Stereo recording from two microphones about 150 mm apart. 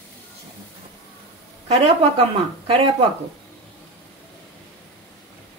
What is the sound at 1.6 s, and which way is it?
Speech, 40° right (ahead or behind).